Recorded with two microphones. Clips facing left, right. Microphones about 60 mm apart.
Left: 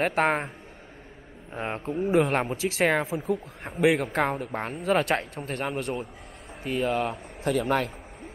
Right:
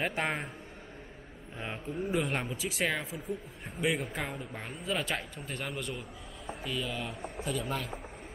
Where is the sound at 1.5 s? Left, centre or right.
Left.